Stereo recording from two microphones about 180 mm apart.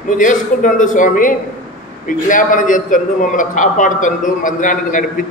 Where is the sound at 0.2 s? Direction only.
45° left (ahead or behind).